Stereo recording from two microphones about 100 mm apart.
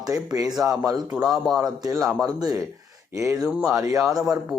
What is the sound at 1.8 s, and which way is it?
Speech, 35° right (ahead or behind).